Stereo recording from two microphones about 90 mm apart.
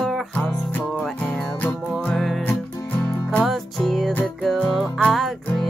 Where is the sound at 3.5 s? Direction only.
5° left (ahead or behind).